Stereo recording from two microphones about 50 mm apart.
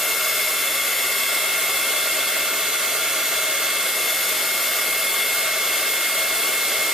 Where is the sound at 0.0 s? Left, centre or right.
Centre.